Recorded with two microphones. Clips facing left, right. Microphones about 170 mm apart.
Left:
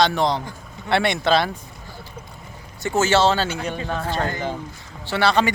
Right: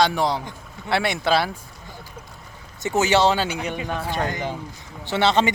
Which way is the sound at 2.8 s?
15° right (ahead or behind).